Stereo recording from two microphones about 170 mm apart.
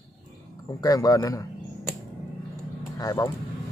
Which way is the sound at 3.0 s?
20° left (ahead or behind).